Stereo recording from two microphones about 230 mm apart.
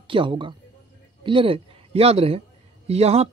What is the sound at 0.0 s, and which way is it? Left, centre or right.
Speech, right.